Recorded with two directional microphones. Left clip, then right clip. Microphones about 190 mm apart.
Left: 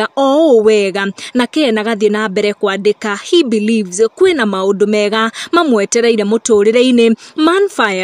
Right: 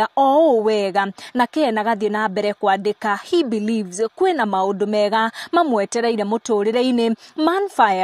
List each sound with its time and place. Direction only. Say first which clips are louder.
0.0 s a woman's voice: left 3 dB; 10° left (ahead or behind)